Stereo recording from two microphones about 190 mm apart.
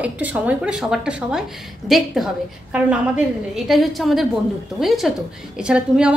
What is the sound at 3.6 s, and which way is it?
A woman's voice, centre (ahead or behind).